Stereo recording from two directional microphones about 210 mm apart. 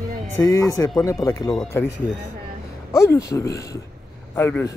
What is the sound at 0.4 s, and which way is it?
Speech, 15° left (ahead or behind).